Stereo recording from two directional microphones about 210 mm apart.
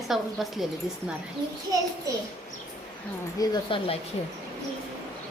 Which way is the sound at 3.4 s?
20° left (ahead or behind).